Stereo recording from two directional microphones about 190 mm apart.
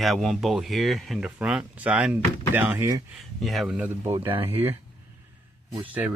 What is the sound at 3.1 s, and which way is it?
Speech, centre (ahead or behind).